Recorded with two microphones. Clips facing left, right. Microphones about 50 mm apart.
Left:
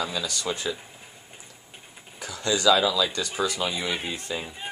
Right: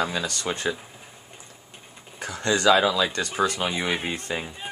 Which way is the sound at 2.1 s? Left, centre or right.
Right.